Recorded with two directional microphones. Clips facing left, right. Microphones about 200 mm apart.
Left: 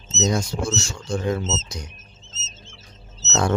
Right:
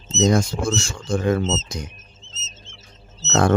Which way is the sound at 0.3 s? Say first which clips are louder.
Right 4 dB; 55° right (ahead or behind).